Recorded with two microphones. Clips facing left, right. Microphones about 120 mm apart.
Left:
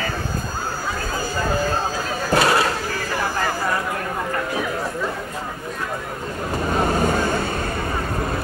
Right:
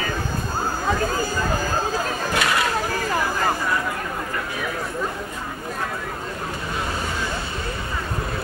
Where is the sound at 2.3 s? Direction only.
35° left (ahead or behind).